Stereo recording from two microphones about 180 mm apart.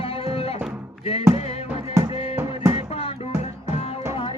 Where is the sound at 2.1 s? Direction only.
30° left (ahead or behind).